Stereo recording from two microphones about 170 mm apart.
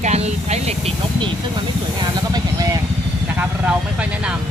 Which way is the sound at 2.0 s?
20° right (ahead or behind).